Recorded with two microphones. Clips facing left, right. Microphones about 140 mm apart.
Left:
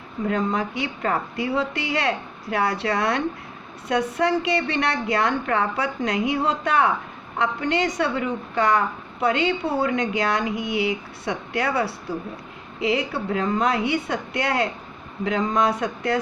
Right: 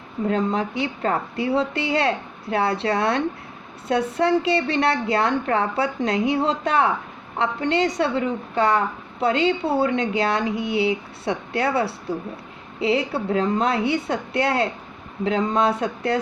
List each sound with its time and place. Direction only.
0.3 s a woman's voice: 30° right (ahead or behind)